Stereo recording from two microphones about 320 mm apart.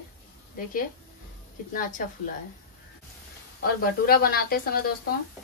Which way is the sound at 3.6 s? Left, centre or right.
Left.